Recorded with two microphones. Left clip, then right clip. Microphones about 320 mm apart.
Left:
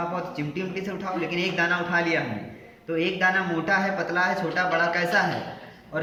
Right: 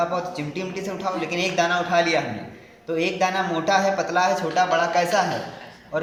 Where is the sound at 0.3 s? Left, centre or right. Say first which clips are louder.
Right 1 dB; centre.